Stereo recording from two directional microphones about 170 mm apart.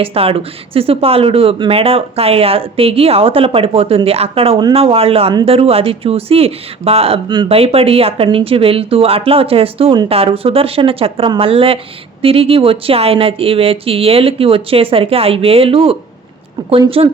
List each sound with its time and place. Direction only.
0.0 s speech: 35° right (ahead or behind)